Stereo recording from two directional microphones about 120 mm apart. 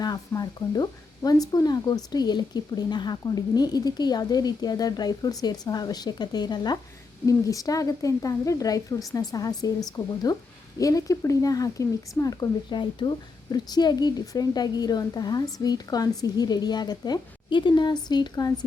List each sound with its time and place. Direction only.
0.0 s speech: 35° left (ahead or behind)